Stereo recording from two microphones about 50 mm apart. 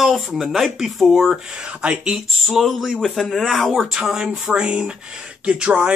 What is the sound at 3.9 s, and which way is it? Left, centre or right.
Speech, centre.